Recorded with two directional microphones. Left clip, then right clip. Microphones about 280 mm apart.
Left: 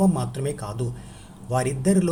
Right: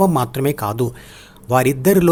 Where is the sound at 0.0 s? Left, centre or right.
Right.